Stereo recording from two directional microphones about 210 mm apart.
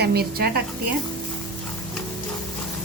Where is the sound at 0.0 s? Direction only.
50° right (ahead or behind).